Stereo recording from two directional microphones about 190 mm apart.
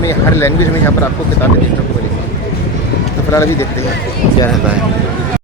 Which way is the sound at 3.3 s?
15° left (ahead or behind).